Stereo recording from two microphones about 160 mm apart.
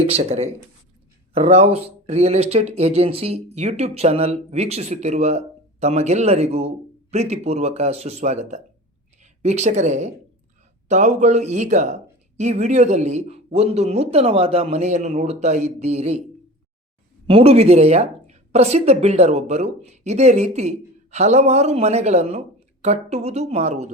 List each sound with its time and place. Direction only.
0.1 s speech: 40° right (ahead or behind)
17.2 s speech: 35° right (ahead or behind)